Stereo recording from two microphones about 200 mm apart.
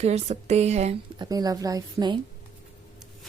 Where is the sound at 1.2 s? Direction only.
20° right (ahead or behind).